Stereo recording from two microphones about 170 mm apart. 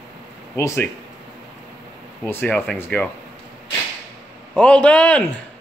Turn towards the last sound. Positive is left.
turn(degrees=5)  # may be behind; listen again after turning